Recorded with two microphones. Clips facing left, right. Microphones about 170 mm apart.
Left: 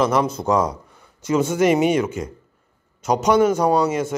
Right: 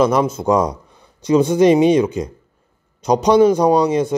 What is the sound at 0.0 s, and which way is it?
Speech, 10° right (ahead or behind).